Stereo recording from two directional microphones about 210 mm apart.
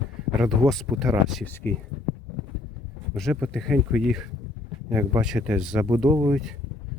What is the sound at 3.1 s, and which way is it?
Speech, centre (ahead or behind).